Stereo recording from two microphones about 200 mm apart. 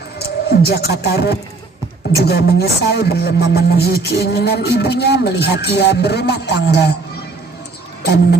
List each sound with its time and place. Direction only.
0.5 s speech: 55° left (ahead or behind)